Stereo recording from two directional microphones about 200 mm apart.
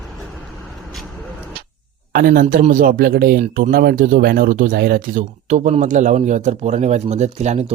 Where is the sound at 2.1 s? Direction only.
40° right (ahead or behind).